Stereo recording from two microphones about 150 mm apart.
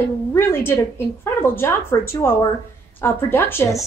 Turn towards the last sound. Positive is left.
turn(degrees=15)  # may be behind; listen again after turning